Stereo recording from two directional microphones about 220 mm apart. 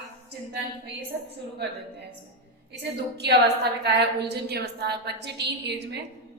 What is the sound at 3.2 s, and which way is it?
A woman's voice, 50° right (ahead or behind).